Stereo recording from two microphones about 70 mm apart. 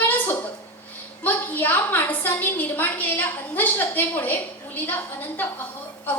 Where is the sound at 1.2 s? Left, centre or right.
Left.